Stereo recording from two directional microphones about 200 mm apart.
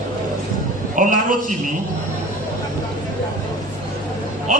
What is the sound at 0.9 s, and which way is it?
Speech, 40° right (ahead or behind).